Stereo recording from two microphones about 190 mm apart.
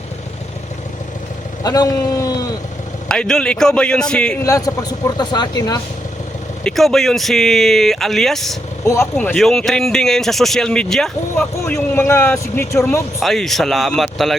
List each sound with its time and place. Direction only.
1.6 s speech: 20° left (ahead or behind)
3.1 s speech: 5° left (ahead or behind)
4.4 s speech: 20° left (ahead or behind)
6.7 s speech: centre (ahead or behind)
11.3 s speech: 10° left (ahead or behind)
13.1 s speech: centre (ahead or behind)